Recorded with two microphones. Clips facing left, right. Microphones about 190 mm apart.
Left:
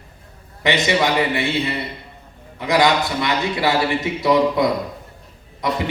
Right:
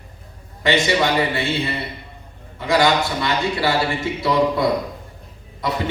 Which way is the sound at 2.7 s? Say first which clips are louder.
Even; 20° left (ahead or behind).